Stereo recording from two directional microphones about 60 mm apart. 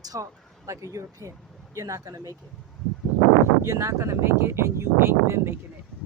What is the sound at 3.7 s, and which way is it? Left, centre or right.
Speech, right.